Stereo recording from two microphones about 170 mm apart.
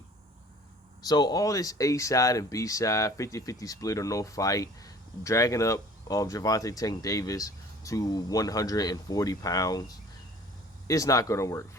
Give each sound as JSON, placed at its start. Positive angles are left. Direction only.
{"t": 1.0, "sound": "speech", "side_deg": 25}
{"t": 10.8, "sound": "speech", "side_deg": 20}